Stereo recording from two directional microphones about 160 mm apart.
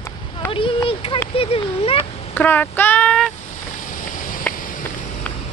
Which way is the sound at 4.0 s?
60° left (ahead or behind).